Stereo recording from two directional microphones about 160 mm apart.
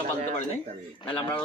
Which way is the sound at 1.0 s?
30° left (ahead or behind).